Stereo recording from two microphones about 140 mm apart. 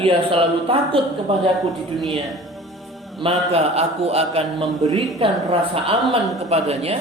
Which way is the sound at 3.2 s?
45° right (ahead or behind).